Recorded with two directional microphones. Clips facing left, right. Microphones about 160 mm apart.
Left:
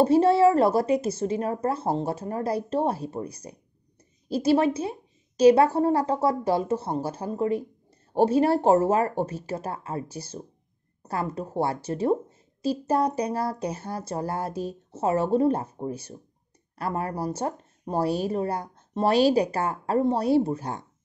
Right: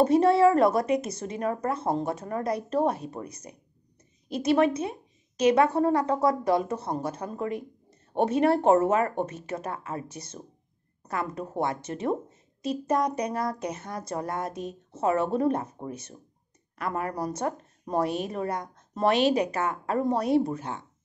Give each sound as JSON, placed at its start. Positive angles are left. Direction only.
{"t": 0.0, "sound": "a woman's voice", "side_deg": 30}